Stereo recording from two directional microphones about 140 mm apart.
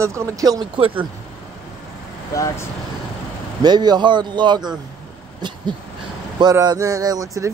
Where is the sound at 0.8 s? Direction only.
40° right (ahead or behind).